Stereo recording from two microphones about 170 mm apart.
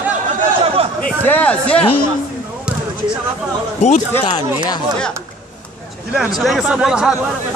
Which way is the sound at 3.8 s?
45° left (ahead or behind).